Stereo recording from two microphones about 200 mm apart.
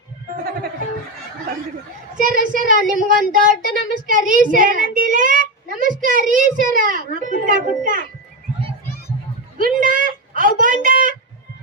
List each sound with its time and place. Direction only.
2.1 s a child's voice: 40° right (ahead or behind)
9.6 s a woman's voice: 40° right (ahead or behind)